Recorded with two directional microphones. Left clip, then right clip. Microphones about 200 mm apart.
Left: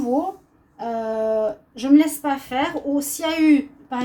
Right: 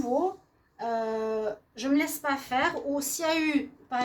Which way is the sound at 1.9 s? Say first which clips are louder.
Left 10 dB; 45° right (ahead or behind).